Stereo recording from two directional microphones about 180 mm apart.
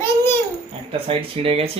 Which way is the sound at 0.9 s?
30° right (ahead or behind).